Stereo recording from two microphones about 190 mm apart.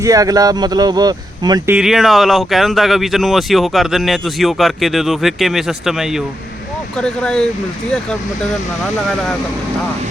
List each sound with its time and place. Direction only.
0.0 s speech: 20° right (ahead or behind)
1.7 s speech: centre (ahead or behind)